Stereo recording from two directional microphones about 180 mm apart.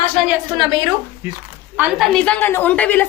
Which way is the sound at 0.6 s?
25° right (ahead or behind).